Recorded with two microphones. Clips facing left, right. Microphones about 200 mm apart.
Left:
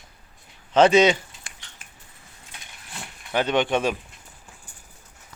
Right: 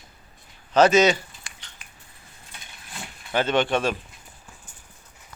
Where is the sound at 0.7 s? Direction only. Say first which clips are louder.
Left 1 dB; 25° left (ahead or behind).